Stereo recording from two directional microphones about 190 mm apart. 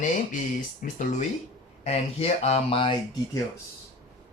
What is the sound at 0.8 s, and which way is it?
Speech, 40° left (ahead or behind).